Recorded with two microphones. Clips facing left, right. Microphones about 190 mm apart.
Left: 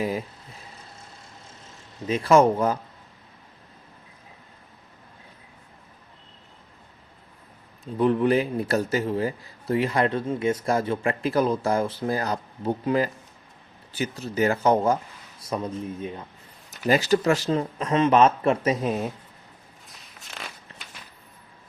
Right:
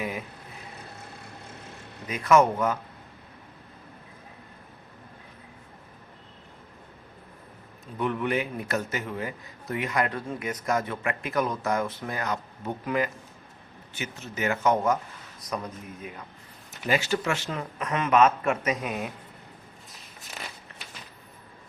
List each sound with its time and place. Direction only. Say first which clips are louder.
0.0 s vehicle: left 5 dB; 35° left (ahead or behind)
0.9 s vehicle: right 4 dB; 60° right (ahead or behind)
2.0 s a man's voice: left 3 dB; 30° left (ahead or behind)
7.9 s a man's voice: left 7 dB; 35° left (ahead or behind)
19.9 s a sound: left 1 dB; centre (ahead or behind)